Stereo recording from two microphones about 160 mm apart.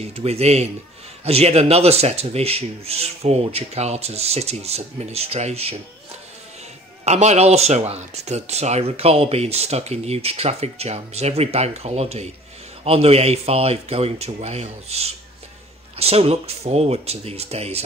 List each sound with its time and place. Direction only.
0.0 s speech: 40° right (ahead or behind)
7.1 s speech: 45° right (ahead or behind)